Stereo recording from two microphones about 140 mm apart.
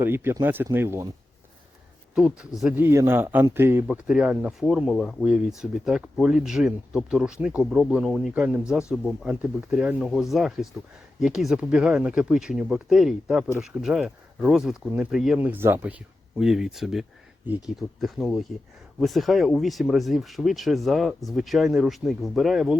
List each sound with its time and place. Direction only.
0.0 s speech: 15° right (ahead or behind)
2.1 s speech: 5° right (ahead or behind)
3.8 s speech: 5° right (ahead or behind)